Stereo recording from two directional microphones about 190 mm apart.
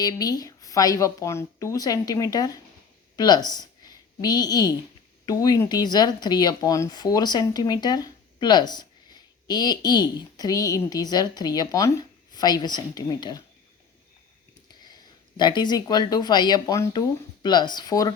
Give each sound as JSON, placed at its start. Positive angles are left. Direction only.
{"t": 0.0, "sound": "a woman's voice", "side_deg": 20}
{"t": 15.4, "sound": "speech", "side_deg": 25}